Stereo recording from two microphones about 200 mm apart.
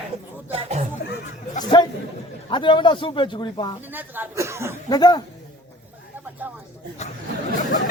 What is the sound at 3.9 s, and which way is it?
Speech, 10° right (ahead or behind).